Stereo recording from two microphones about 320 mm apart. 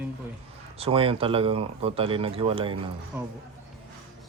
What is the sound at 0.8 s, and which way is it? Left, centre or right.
Speech, centre.